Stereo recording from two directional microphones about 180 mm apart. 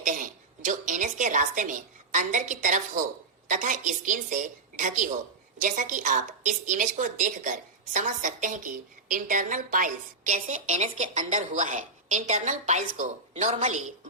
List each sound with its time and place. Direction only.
0.0 s a woman's voice: 45° right (ahead or behind)